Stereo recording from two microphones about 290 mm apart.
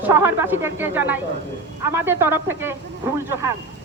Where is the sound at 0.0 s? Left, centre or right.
Centre.